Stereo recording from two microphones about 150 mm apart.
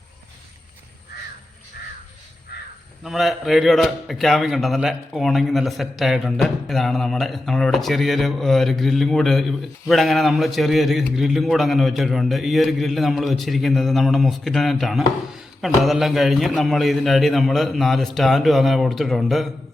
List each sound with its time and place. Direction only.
2.5 s crow: 90° left
3.0 s a man's voice: centre (ahead or behind)